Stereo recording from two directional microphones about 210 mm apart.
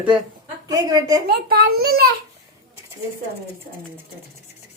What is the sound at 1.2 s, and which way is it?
Speech, 45° right (ahead or behind).